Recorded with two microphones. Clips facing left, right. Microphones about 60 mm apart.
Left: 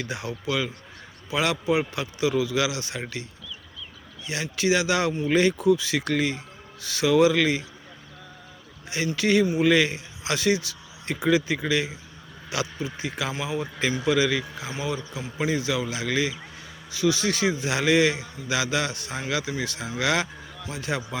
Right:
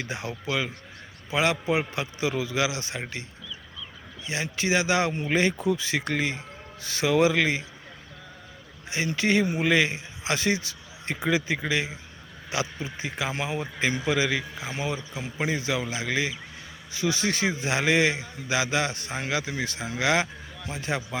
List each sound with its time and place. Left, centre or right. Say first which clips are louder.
0.0 s a man's voice: left 2 dB; right
4.3 s a man's voice: left 2 dB; right
9.1 s a man's voice: left 3 dB; right
13.3 s a man's voice: even; right
13.6 s a man's voice: left 1 dB; right